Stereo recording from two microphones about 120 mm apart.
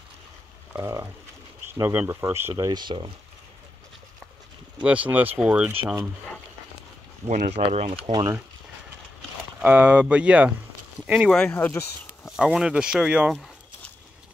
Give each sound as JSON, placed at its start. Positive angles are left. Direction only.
{"t": 0.7, "sound": "speech", "side_deg": -25}
{"t": 2.7, "sound": "speech", "side_deg": -40}
{"t": 4.8, "sound": "speech", "side_deg": -10}
{"t": 7.2, "sound": "speech", "side_deg": -70}
{"t": 8.1, "sound": "speech", "side_deg": -35}
{"t": 9.6, "sound": "speech", "side_deg": -15}
{"t": 11.5, "sound": "speech", "side_deg": 20}
{"t": 12.3, "sound": "speech", "side_deg": -5}